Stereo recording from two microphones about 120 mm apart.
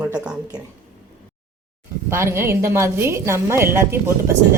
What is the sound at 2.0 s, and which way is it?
Speech, 20° right (ahead or behind).